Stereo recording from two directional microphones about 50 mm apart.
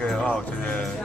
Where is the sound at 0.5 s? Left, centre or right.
Left.